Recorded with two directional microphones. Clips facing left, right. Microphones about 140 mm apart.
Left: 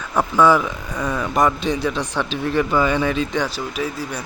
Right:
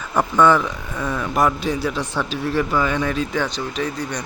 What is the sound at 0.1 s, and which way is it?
Speech, 5° left (ahead or behind).